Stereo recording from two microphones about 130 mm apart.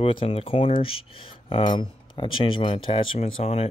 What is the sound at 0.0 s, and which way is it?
Speech, 45° left (ahead or behind).